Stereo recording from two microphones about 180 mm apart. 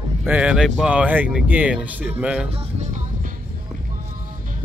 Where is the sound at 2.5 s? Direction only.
45° right (ahead or behind).